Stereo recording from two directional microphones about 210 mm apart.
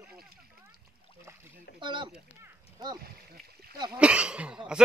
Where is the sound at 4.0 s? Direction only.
5° right (ahead or behind).